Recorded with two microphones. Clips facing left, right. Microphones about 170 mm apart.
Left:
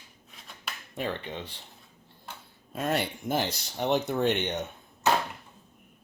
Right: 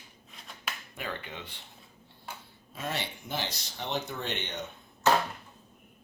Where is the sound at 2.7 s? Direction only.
55° left (ahead or behind).